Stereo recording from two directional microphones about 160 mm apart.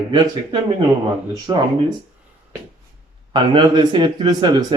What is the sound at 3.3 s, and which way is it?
Speech, 30° right (ahead or behind).